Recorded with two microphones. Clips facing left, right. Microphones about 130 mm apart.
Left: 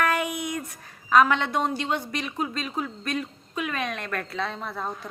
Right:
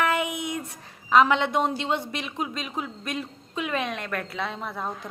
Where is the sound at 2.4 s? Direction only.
15° right (ahead or behind).